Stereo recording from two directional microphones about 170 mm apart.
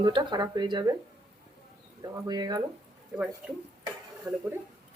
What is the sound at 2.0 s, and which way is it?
Speech, 25° right (ahead or behind).